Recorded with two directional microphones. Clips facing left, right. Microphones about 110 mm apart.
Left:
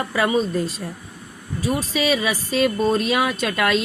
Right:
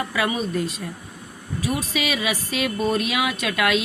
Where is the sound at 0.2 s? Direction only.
35° left (ahead or behind).